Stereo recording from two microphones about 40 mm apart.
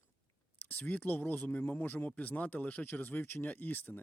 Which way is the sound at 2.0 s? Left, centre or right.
Left.